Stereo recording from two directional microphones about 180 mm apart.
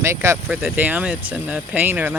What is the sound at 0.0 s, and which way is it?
Speech, 15° right (ahead or behind).